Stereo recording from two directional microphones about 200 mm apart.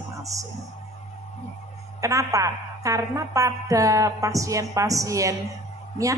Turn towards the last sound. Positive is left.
turn(degrees=-15)  # may be behind; listen again after turning